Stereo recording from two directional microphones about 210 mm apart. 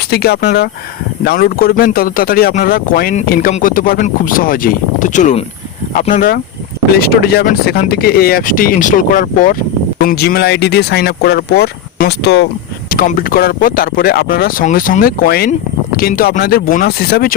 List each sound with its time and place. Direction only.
0.1 s speech: 50° left (ahead or behind)
12.9 s speech: 45° left (ahead or behind)